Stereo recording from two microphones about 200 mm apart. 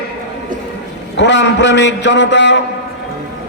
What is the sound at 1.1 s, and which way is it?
A man's voice, 65° left (ahead or behind).